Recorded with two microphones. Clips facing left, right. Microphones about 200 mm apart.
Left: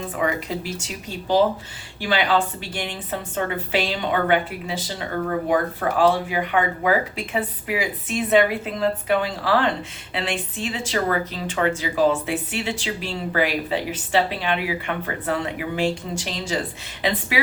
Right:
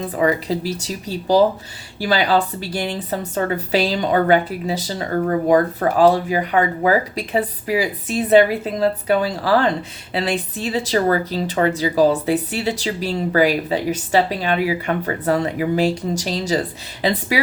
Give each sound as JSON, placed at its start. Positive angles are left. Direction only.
{"t": 0.0, "sound": "speech", "side_deg": -35}